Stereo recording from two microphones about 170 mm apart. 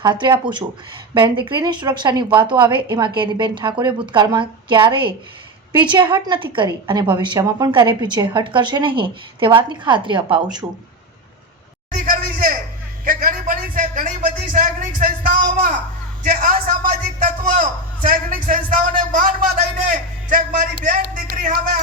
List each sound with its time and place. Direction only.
0.0 s speech: 30° right (ahead or behind)
11.9 s a sound: 55° right (ahead or behind)
16.2 s a man's voice: 55° right (ahead or behind)